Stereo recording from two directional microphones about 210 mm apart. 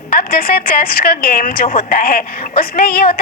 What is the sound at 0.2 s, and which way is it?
A woman's voice, 45° left (ahead or behind).